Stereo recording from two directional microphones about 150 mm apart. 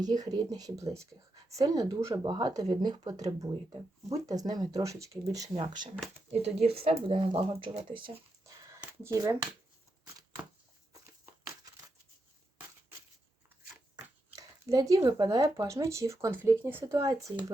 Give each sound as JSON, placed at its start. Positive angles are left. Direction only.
{"t": 0.0, "sound": "speech", "side_deg": -25}
{"t": 6.4, "sound": "speech", "side_deg": -40}
{"t": 8.4, "sound": "a sound", "side_deg": -20}
{"t": 9.1, "sound": "speech", "side_deg": -20}
{"t": 14.3, "sound": "a sound", "side_deg": -25}
{"t": 15.0, "sound": "speech", "side_deg": -25}